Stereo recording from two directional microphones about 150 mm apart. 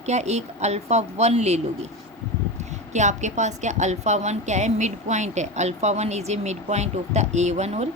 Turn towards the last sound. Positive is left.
turn(degrees=-45)  # may be behind; listen again after turning